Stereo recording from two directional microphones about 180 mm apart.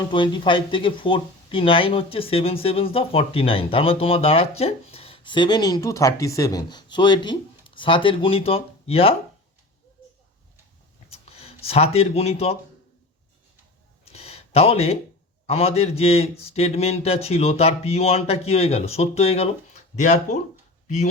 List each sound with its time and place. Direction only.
0.1 s speech: 25° left (ahead or behind)
11.1 s speech: 35° left (ahead or behind)
14.0 s a sound: 35° left (ahead or behind)
15.4 s speech: 35° left (ahead or behind)